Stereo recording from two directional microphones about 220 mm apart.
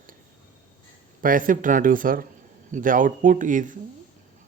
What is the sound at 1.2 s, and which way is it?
Speech, 40° right (ahead or behind).